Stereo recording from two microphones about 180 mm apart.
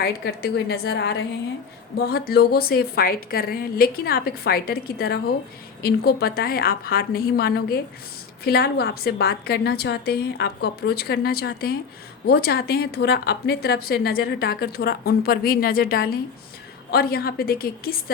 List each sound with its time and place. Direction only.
0.0 s speech: 60° left (ahead or behind)